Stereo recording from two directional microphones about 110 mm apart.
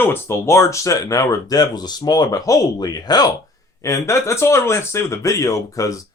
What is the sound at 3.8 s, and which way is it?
Speech, 25° left (ahead or behind).